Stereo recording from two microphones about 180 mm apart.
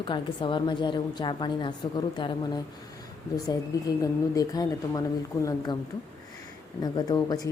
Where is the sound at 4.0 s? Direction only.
20° left (ahead or behind).